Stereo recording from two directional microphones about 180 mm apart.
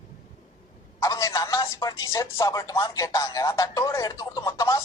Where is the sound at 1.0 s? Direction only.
20° left (ahead or behind).